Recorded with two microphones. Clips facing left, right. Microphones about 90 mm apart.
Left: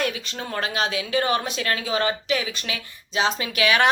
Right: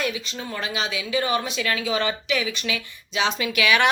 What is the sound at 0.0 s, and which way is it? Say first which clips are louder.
Speech: left 1 dB; 55° left (ahead or behind).